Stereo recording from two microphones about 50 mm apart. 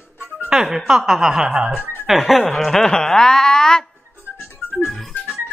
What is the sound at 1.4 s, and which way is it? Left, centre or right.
Speech, right.